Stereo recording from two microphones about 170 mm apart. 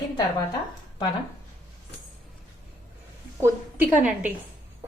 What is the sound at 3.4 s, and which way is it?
Speech, 10° right (ahead or behind).